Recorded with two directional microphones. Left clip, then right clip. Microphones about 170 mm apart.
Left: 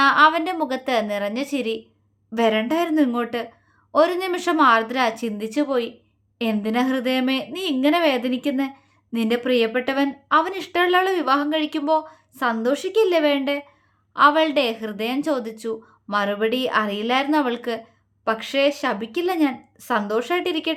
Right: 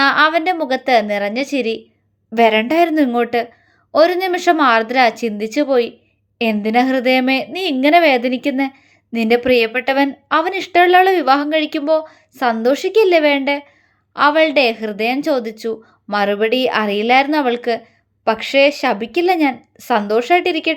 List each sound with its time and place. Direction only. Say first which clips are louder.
0.0 s a woman's voice: right 3 dB; 20° right (ahead or behind)